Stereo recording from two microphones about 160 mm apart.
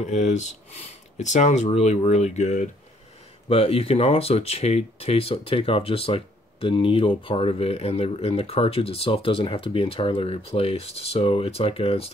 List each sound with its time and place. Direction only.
0.0 s speech: 45° left (ahead or behind)
3.4 s speech: 35° left (ahead or behind)